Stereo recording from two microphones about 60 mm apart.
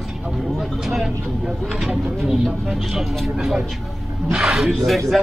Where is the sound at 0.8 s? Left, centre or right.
Centre.